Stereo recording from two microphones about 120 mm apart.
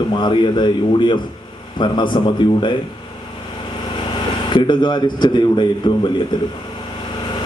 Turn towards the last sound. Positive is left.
turn(degrees=40)  # may be behind; listen again after turning